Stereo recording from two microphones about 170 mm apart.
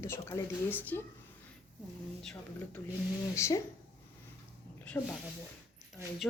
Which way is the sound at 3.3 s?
15° left (ahead or behind).